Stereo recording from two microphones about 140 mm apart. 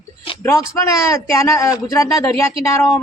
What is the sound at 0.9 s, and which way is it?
Speech, 20° left (ahead or behind).